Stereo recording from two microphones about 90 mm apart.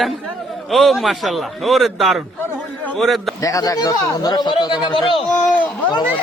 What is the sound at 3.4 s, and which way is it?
A man's voice, 40° left (ahead or behind).